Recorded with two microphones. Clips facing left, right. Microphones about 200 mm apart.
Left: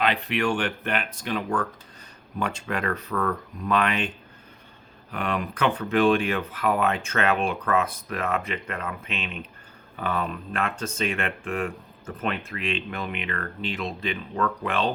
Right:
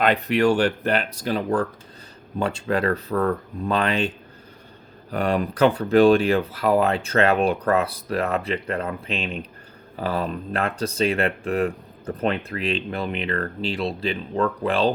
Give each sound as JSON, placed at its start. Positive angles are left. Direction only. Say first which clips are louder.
{"t": 0.0, "sound": "speech", "louder": "right 6 dB", "side_deg": -45}
{"t": 5.1, "sound": "speech", "louder": "right 6 dB", "side_deg": -35}